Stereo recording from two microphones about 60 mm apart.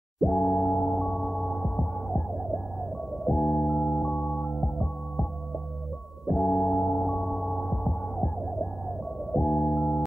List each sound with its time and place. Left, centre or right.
0.2 s a sound: centre
3.3 s music: centre
6.2 s gong: centre
9.3 s music: centre